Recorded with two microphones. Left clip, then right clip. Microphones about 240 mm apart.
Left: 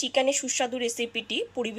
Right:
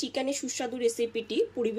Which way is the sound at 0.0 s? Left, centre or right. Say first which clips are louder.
Left 7 dB; centre.